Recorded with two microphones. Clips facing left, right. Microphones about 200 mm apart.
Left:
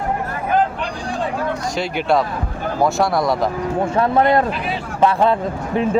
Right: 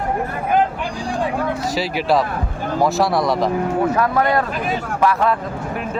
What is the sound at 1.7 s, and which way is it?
Speech, centre (ahead or behind).